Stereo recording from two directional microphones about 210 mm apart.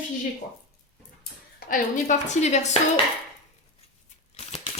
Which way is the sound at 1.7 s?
35° left (ahead or behind).